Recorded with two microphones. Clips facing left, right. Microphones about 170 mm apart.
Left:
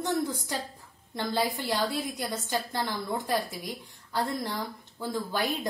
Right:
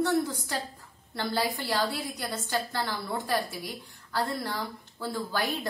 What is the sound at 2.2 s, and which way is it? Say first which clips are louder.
A woman's voice: even; 15° left (ahead or behind).